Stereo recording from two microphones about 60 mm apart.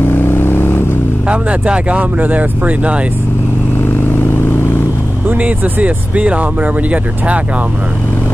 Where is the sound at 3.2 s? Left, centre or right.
Left.